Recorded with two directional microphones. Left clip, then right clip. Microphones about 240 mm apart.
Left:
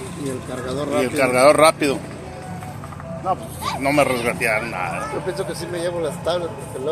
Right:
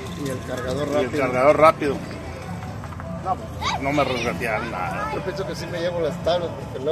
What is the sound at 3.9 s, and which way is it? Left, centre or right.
Speech, left.